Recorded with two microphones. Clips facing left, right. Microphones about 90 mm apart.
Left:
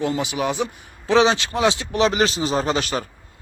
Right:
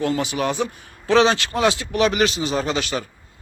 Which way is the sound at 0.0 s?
20° left (ahead or behind).